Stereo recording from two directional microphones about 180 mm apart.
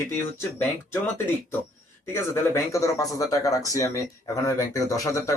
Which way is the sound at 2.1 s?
15° left (ahead or behind).